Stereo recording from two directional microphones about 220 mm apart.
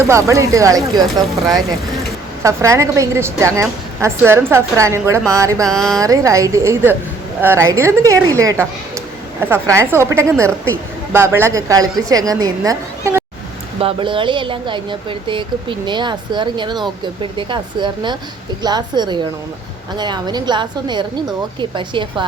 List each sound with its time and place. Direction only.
0.1 s a woman's voice: 15° right (ahead or behind)
2.4 s a woman's voice: 15° right (ahead or behind)
5.6 s a sound: centre (ahead or behind)
6.0 s a woman's voice: 15° right (ahead or behind)